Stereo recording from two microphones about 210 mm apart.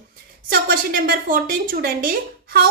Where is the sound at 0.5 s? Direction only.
45° right (ahead or behind).